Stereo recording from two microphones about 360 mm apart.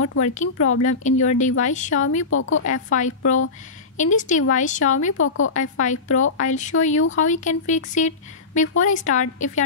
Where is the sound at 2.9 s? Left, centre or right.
Left.